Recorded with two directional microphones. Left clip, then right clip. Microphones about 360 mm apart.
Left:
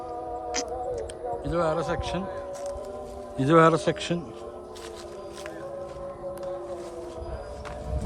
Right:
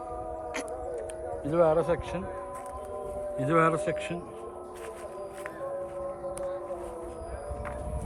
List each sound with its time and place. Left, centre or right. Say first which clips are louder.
1.5 s a man's voice: right 3 dB; centre
3.3 s a man's voice: left 6 dB; centre